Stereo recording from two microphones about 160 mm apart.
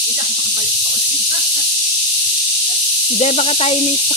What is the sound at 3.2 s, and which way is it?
Speech, 40° left (ahead or behind).